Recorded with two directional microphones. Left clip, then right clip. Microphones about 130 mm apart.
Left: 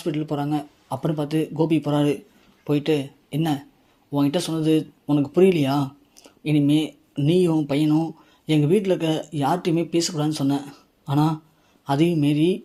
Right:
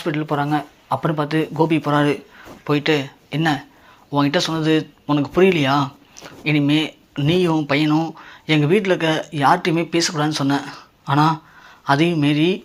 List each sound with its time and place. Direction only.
0.0 s speech: 30° left (ahead or behind)